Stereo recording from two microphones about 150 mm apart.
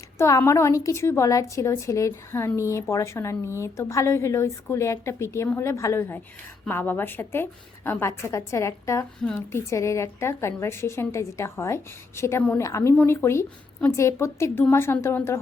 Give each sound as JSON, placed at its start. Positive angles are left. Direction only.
{"t": 0.2, "sound": "a woman's voice", "side_deg": 20}